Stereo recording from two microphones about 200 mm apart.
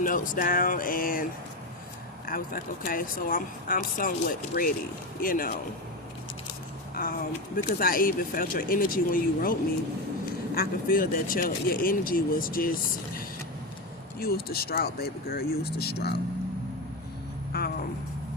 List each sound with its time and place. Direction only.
0.0 s speech: 40° left (ahead or behind)
6.9 s speech: 45° left (ahead or behind)
14.2 s speech: 50° left (ahead or behind)
17.5 s speech: 50° left (ahead or behind)